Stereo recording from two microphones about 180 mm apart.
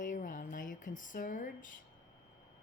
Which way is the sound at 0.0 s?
45° left (ahead or behind).